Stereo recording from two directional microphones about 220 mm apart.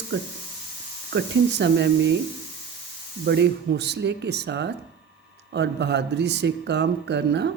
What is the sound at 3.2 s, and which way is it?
Speech, 50° right (ahead or behind).